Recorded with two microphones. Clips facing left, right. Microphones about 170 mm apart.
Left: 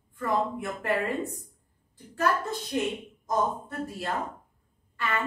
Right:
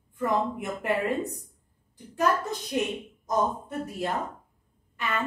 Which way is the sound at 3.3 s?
20° right (ahead or behind).